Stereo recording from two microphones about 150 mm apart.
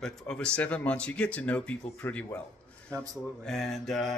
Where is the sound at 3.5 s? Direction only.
5° left (ahead or behind).